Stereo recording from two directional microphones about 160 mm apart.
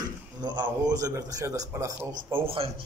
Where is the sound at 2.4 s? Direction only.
35° right (ahead or behind).